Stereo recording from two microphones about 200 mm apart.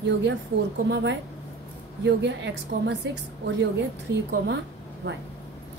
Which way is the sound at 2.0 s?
60° right (ahead or behind).